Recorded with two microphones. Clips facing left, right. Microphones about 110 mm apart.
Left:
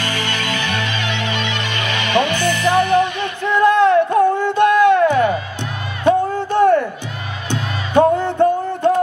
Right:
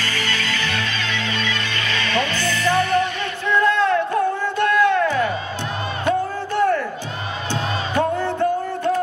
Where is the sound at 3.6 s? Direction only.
20° left (ahead or behind).